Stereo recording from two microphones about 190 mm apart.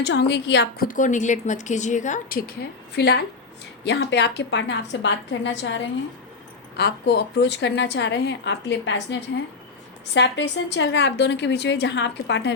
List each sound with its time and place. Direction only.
0.0 s a woman's voice: 65° left (ahead or behind)
0.9 s a woman's voice: 40° left (ahead or behind); by 9.1 s 70° left (ahead or behind)
10.2 s a woman's voice: 70° left (ahead or behind)